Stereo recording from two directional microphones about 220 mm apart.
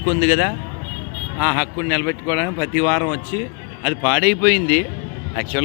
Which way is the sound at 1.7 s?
15° right (ahead or behind).